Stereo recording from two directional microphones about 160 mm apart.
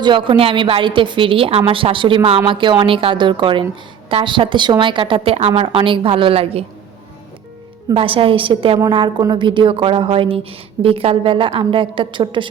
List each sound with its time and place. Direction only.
0.0 s a woman's voice: 30° right (ahead or behind)
7.9 s a woman's voice: 35° right (ahead or behind)